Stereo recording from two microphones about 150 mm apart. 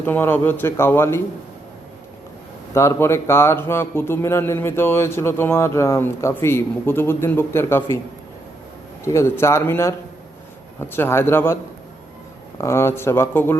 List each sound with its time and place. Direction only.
0.0 s a man's voice: 15° left (ahead or behind)
2.7 s a man's voice: 20° left (ahead or behind)
9.0 s a man's voice: 20° left (ahead or behind)
12.5 s a man's voice: 20° left (ahead or behind)